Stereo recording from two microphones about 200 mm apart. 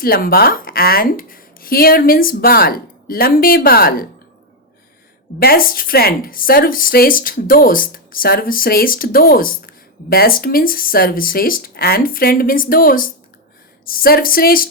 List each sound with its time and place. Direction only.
0.0 s speech: 50° left (ahead or behind)
5.4 s speech: 50° left (ahead or behind)